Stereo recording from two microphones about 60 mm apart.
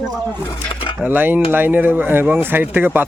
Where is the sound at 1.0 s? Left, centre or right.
Right.